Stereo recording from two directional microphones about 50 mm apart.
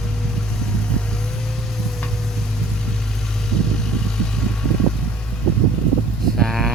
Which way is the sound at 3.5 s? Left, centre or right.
Centre.